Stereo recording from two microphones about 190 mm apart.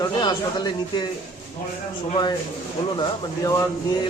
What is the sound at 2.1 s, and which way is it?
A man's voice, 25° left (ahead or behind).